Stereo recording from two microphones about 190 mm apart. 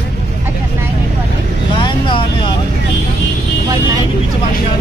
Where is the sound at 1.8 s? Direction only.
25° left (ahead or behind).